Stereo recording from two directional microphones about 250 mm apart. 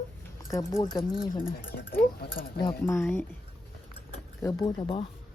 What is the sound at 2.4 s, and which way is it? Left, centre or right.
Speech, centre.